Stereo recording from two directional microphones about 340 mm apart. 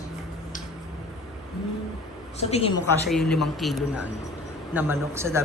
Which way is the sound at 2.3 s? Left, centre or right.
Centre.